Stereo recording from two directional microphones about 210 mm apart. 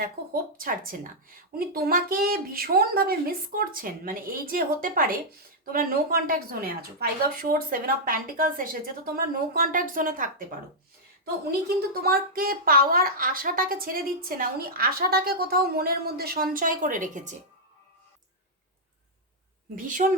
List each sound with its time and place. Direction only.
0.0 s speech: 45° right (ahead or behind)
12.0 s speech: 45° right (ahead or behind)
19.7 s a woman's voice: 40° right (ahead or behind)